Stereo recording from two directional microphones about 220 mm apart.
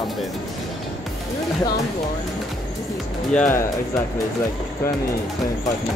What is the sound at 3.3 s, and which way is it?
Speech, 10° left (ahead or behind).